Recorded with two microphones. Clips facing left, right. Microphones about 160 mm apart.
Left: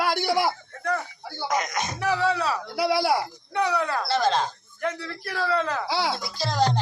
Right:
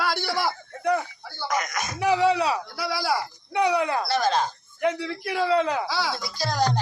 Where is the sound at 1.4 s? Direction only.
20° left (ahead or behind).